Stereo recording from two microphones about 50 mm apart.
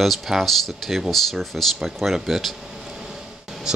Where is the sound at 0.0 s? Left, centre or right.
Centre.